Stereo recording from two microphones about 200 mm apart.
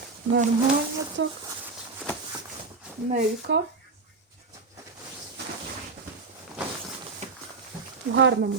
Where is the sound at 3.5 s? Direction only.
60° right (ahead or behind).